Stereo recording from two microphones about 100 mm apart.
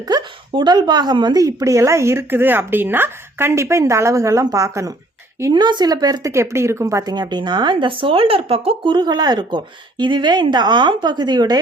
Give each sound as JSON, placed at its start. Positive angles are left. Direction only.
{"t": 0.1, "sound": "speech", "side_deg": -50}
{"t": 5.5, "sound": "a woman's voice", "side_deg": -45}
{"t": 6.3, "sound": "a woman's voice", "side_deg": -25}
{"t": 8.9, "sound": "a woman's voice", "side_deg": -45}